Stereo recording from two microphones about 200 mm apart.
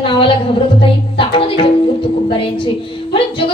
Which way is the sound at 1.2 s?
25° left (ahead or behind).